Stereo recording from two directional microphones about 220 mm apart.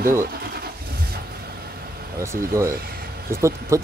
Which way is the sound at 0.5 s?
45° right (ahead or behind).